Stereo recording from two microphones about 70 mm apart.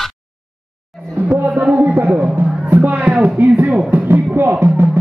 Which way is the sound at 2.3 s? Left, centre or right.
Right.